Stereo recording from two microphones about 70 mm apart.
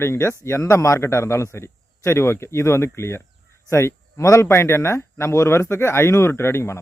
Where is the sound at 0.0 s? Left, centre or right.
Left.